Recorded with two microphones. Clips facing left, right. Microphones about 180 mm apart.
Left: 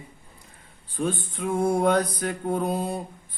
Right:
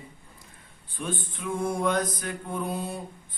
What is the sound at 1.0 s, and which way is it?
Mantra, 35° left (ahead or behind).